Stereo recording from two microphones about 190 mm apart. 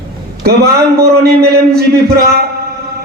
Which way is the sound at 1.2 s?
55° right (ahead or behind).